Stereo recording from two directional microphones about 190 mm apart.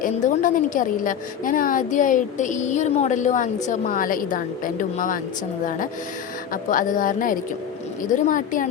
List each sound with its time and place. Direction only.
0.0 s a woman's voice: 45° left (ahead or behind)
6.5 s a woman's voice: 45° left (ahead or behind)